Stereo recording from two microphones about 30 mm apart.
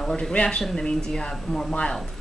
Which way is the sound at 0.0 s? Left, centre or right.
Left.